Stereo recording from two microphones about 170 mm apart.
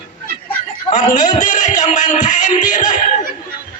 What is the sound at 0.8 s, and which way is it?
Speech, 45° left (ahead or behind).